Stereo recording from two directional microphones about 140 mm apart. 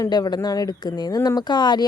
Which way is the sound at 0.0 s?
30° left (ahead or behind).